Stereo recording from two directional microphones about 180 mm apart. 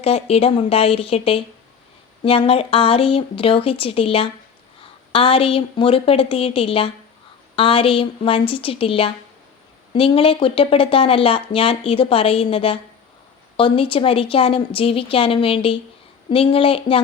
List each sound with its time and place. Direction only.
0.0 s speech: 35° left (ahead or behind)